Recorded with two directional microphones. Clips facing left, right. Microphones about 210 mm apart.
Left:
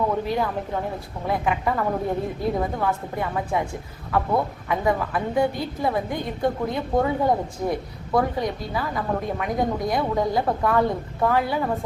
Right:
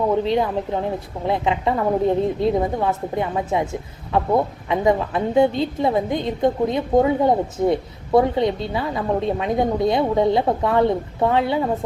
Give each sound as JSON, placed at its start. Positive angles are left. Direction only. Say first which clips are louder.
{"t": 0.3, "sound": "a woman's voice", "louder": "right 5 dB", "side_deg": -20}